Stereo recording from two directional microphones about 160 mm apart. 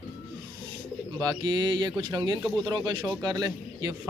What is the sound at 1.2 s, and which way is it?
A man's voice, 25° right (ahead or behind).